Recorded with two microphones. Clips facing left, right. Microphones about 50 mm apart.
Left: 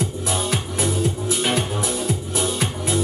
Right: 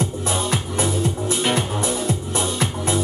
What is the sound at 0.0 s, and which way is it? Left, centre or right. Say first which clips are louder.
Music: right 1 dB; centre.